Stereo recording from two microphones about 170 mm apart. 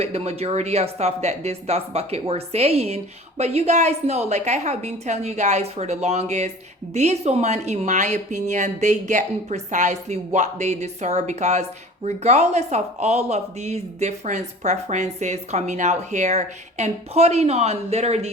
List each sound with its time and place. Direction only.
0.0 s a woman's voice: 40° right (ahead or behind)